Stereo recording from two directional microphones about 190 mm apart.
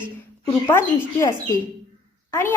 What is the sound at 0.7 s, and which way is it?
A woman's voice, 15° left (ahead or behind).